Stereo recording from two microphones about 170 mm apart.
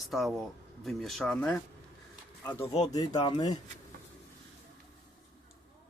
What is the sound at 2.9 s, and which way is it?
Speech, 25° left (ahead or behind).